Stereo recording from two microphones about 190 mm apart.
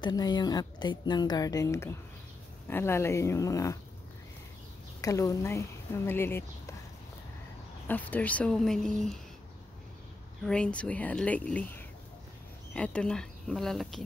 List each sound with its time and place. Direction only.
0.0 s speech: 20° left (ahead or behind)
5.0 s speech: 20° left (ahead or behind)
7.9 s speech: 10° left (ahead or behind)
10.4 s speech: 5° left (ahead or behind)
12.7 s speech: 5° left (ahead or behind)